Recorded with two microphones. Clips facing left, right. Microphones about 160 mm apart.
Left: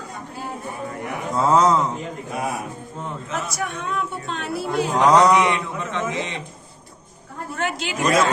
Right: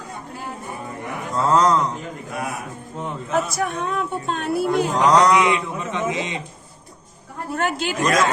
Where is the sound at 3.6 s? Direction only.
45° right (ahead or behind).